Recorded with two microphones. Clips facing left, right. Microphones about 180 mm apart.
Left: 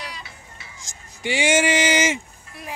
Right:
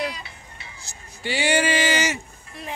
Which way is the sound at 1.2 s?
20° left (ahead or behind).